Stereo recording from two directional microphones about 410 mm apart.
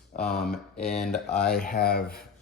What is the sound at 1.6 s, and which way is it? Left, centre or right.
Speech, left.